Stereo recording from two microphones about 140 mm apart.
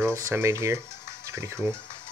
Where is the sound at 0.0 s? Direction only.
20° right (ahead or behind).